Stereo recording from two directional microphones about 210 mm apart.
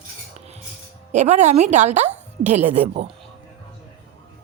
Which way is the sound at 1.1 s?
35° right (ahead or behind).